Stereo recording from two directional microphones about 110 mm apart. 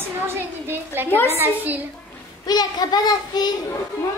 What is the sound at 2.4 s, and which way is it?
A child's voice, 35° left (ahead or behind).